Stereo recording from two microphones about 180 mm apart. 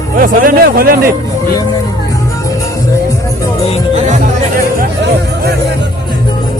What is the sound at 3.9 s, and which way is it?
Music, 45° right (ahead or behind).